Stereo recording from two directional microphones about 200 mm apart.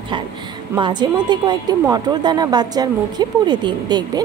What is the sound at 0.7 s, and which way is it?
Speech, 20° right (ahead or behind).